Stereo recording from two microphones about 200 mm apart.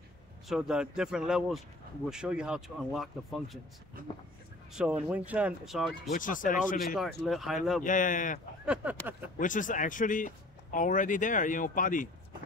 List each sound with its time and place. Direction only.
0.5 s speech: 5° right (ahead or behind)
4.7 s speech: 5° right (ahead or behind)
6.1 s speech: 40° left (ahead or behind)
7.2 s speech: centre (ahead or behind)
7.8 s speech: 40° left (ahead or behind)
9.4 s speech: 40° left (ahead or behind)